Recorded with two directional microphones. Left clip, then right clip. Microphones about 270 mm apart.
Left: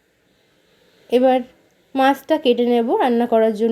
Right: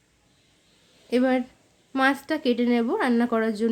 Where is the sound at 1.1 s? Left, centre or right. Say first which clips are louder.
Left 8 dB; centre.